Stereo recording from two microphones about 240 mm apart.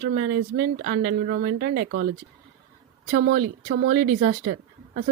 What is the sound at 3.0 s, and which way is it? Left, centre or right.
A woman's voice, right.